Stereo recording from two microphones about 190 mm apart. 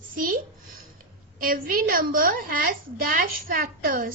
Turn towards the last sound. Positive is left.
turn(degrees=-50)  # may be behind; listen again after turning